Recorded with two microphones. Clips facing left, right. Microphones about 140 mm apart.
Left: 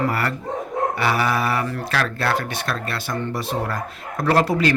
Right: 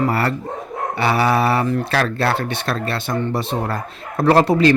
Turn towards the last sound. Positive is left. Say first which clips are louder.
# right 5 dB
turn(degrees=-25)  # may be behind; listen again after turning